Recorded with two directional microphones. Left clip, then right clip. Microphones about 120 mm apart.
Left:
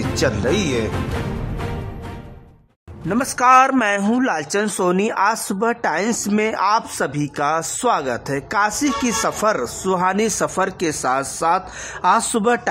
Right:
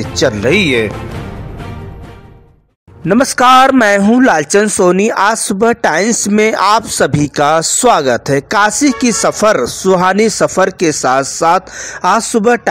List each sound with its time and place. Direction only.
0.5 s speech: 35° right (ahead or behind)
3.1 s a man's voice: 40° right (ahead or behind)